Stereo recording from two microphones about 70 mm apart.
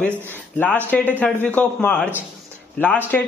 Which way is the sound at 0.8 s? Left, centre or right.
Left.